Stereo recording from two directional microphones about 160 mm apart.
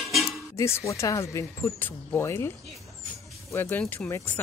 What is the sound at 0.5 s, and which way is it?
Speech, 15° left (ahead or behind).